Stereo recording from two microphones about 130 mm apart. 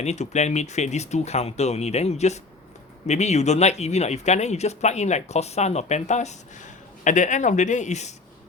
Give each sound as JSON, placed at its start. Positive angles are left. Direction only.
{"t": 0.0, "sound": "speech", "side_deg": 60}